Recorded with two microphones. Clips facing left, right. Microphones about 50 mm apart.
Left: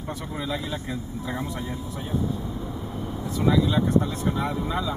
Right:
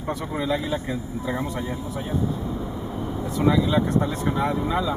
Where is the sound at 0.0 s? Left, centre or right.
Centre.